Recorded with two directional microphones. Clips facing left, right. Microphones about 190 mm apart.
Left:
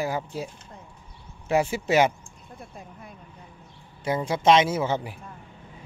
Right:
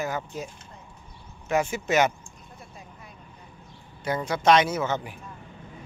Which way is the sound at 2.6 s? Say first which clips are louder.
Left 5 dB; 55° left (ahead or behind).